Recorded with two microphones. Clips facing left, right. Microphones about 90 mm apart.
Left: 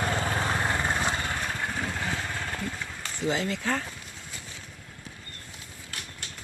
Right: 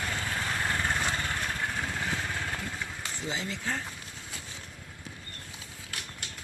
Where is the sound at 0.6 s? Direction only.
25° left (ahead or behind); by 3.1 s 10° right (ahead or behind).